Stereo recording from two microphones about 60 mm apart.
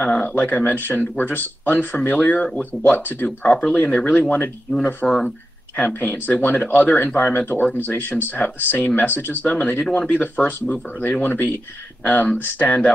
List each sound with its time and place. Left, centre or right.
0.0 s speech: left
3.3 s speech: centre
3.7 s speech: left
4.2 s speech: left
5.0 s speech: centre
5.9 s speech: left